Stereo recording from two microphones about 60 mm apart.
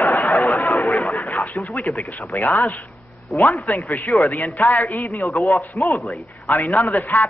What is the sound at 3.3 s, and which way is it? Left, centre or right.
Speech, centre.